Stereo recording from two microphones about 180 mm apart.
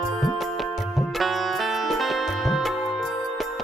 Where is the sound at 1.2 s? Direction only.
Centre (ahead or behind).